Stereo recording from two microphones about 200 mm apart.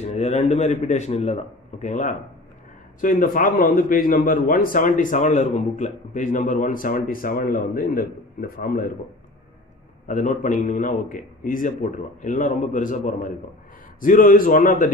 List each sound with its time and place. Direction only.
0.0 s a man's voice: 35° left (ahead or behind)
10.0 s a man's voice: 40° left (ahead or behind)